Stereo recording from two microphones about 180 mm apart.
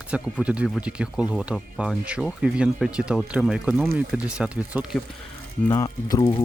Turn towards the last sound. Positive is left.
turn(degrees=25)  # may be behind; listen again after turning